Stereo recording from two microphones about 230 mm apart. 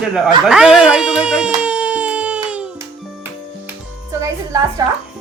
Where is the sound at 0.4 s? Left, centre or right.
Centre.